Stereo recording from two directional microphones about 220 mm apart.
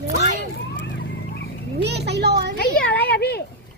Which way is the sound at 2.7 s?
5° left (ahead or behind).